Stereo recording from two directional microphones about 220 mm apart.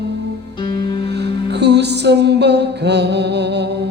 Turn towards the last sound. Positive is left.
turn(degrees=-50)  # may be behind; listen again after turning